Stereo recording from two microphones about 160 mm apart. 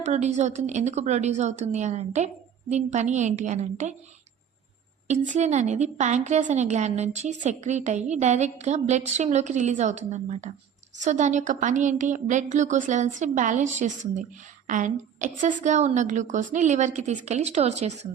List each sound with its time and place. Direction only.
0.0 s a woman's voice: 50° right (ahead or behind)
5.0 s a woman's voice: 45° right (ahead or behind)